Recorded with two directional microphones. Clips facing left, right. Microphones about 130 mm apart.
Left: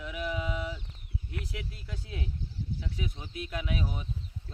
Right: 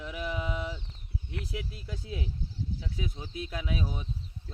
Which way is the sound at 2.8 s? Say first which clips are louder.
Right 1 dB; 30° right (ahead or behind).